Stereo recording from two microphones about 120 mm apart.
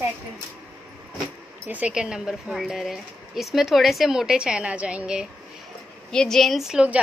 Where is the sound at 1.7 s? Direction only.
10° right (ahead or behind).